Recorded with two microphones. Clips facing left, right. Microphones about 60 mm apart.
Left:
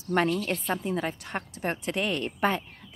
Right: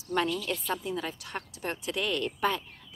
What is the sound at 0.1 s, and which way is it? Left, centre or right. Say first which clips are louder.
A woman's voice: left 4 dB; left.